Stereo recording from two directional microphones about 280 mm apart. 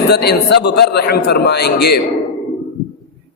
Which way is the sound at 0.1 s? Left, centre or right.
Left.